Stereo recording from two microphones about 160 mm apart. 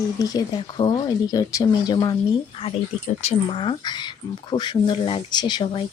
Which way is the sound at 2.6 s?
35° left (ahead or behind).